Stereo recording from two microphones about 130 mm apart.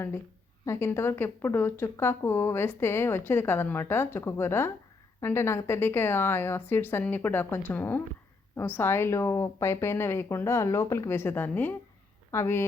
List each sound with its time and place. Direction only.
0.6 s a woman's voice: 20° left (ahead or behind)